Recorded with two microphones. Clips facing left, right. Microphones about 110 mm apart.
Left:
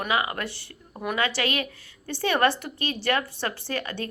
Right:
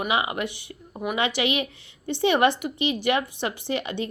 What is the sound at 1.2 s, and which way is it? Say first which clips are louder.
A woman's voice: right 2 dB; 20° right (ahead or behind).